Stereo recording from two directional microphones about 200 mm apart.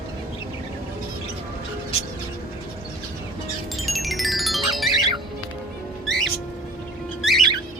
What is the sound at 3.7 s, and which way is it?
Music, centre (ahead or behind).